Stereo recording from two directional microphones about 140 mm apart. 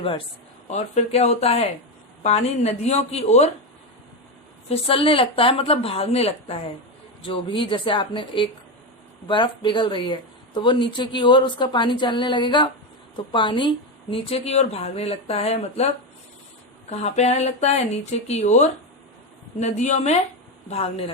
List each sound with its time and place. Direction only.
0.7 s a woman's voice: 50° left (ahead or behind)
4.7 s a woman's voice: 40° left (ahead or behind)
16.9 s a woman's voice: 50° left (ahead or behind)